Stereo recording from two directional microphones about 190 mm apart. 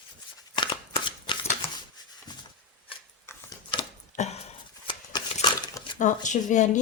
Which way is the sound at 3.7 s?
25° left (ahead or behind).